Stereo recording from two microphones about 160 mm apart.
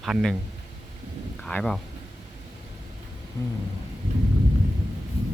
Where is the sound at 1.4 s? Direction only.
5° left (ahead or behind).